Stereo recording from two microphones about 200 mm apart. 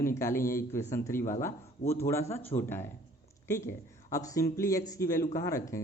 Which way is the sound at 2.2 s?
30° left (ahead or behind).